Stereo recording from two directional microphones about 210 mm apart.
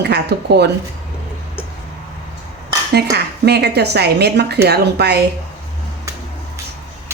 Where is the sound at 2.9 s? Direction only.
50° right (ahead or behind).